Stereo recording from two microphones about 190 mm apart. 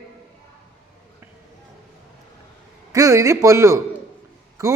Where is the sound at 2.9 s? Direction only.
15° right (ahead or behind).